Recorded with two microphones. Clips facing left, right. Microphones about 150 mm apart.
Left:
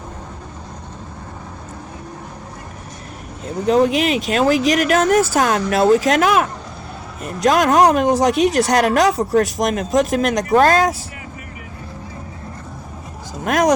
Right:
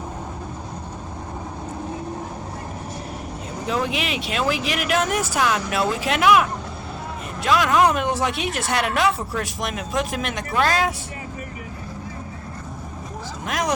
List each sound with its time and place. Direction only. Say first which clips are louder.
3.7 s speech: left 10 dB; 40° left (ahead or behind)
13.4 s speech: left 9 dB; 50° left (ahead or behind)